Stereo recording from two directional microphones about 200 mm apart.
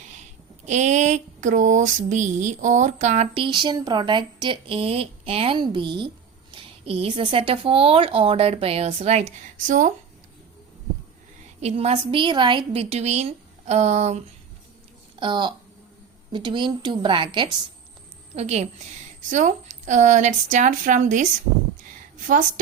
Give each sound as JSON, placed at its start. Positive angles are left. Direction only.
{"t": 0.6, "sound": "mantra", "side_deg": -35}
{"t": 11.6, "sound": "a woman's voice", "side_deg": -30}
{"t": 15.2, "sound": "mantra", "side_deg": -25}
{"t": 18.3, "sound": "a woman's voice", "side_deg": -35}
{"t": 22.3, "sound": "a woman's voice", "side_deg": -40}